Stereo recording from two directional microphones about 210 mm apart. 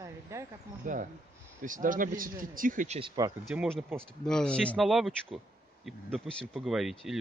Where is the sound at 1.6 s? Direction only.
40° right (ahead or behind).